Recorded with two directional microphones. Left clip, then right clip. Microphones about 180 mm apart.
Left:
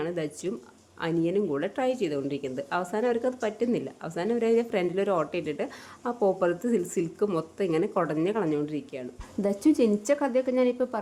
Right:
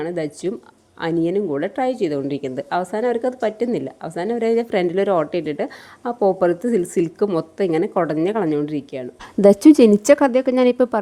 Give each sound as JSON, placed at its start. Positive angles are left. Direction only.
{"t": 0.0, "sound": "speech", "side_deg": -25}
{"t": 9.5, "sound": "a woman's voice", "side_deg": -50}